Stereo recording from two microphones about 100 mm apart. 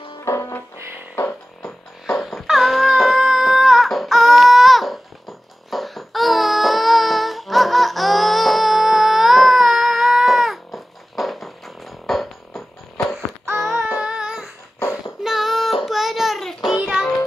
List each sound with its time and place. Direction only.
0.2 s music: 30° left (ahead or behind)
2.0 s music: centre (ahead or behind)
5.7 s a sound: centre (ahead or behind)
15.2 s child singing: 5° right (ahead or behind)
16.7 s music: centre (ahead or behind)